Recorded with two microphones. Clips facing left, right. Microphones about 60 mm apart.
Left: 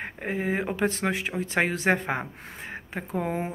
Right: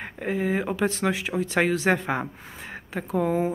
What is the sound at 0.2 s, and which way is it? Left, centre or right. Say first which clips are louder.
Speech: right 3 dB; left.